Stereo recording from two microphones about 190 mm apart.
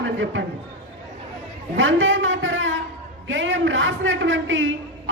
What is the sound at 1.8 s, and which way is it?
A man's voice, 85° right.